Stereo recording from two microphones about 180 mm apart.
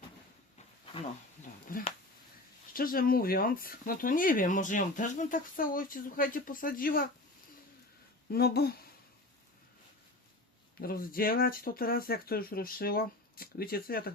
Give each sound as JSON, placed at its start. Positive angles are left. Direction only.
{"t": 1.6, "sound": "speech", "side_deg": 50}
{"t": 8.3, "sound": "speech", "side_deg": 60}
{"t": 10.8, "sound": "speech", "side_deg": 55}